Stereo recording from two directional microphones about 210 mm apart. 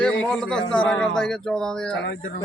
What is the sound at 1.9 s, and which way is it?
Speech, 55° left (ahead or behind).